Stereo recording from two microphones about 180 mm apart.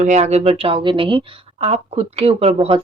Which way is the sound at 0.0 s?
40° right (ahead or behind).